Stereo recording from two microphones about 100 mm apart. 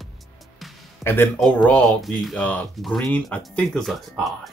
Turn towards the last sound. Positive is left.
turn(degrees=0)  # may be behind; listen again after turning